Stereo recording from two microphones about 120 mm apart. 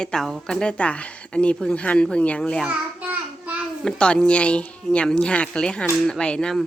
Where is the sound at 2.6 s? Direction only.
10° right (ahead or behind).